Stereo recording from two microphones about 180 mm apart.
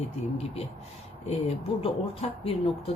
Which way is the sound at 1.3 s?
35° left (ahead or behind).